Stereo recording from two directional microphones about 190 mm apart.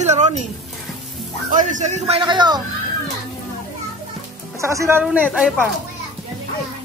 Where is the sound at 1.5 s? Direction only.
40° right (ahead or behind); by 2.6 s 20° right (ahead or behind).